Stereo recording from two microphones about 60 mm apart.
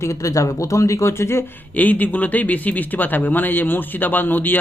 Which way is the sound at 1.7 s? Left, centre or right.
Left.